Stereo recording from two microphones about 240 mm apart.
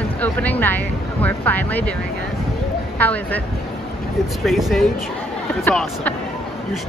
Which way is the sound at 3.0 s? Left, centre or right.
Centre.